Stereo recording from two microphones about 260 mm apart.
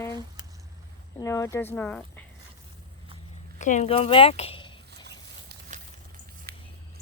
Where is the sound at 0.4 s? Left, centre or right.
Centre.